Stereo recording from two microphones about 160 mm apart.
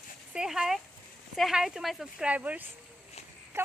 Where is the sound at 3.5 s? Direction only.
15° right (ahead or behind).